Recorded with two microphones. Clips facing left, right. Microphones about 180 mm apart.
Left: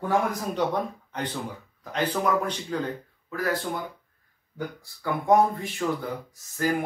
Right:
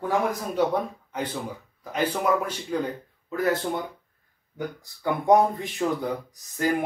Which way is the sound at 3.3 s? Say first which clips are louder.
Right 3 dB; 20° right (ahead or behind).